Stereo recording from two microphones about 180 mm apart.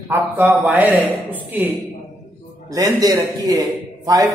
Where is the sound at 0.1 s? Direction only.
10° right (ahead or behind).